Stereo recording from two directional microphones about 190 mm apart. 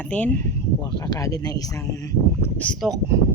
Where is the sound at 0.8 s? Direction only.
20° left (ahead or behind); by 3.0 s centre (ahead or behind).